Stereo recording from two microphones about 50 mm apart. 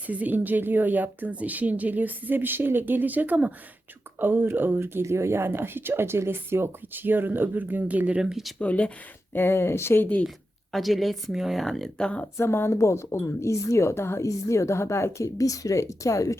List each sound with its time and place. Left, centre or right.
0.1 s speech: right
5.0 s speech: right
7.0 s speech: right
8.2 s speech: centre
8.5 s speech: left
9.3 s speech: left
10.2 s speech: centre
11.9 s speech: centre
12.4 s a woman's voice: left
15.7 s speech: left